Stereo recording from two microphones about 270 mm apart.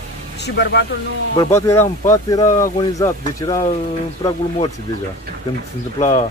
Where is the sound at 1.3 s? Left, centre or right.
Centre.